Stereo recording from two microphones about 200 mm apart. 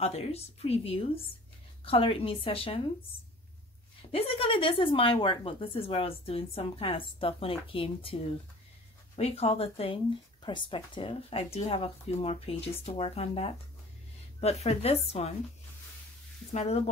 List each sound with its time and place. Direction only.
0.0 s a woman's voice: 30° left (ahead or behind)
4.1 s a woman's voice: 30° left (ahead or behind)
16.5 s a woman's voice: 30° left (ahead or behind)